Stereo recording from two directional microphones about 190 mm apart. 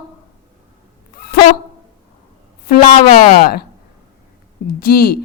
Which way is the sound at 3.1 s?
50° left (ahead or behind).